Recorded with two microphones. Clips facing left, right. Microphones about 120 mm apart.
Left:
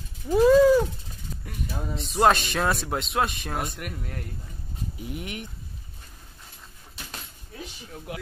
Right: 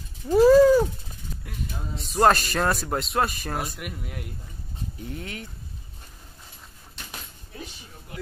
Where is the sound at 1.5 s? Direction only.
Centre (ahead or behind).